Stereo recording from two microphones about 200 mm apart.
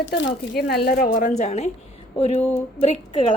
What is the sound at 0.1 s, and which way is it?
Speech, 60° left (ahead or behind).